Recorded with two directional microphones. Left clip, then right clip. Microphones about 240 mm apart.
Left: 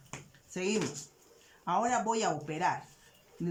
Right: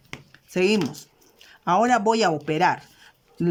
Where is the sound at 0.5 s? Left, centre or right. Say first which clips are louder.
Right 11 dB; right.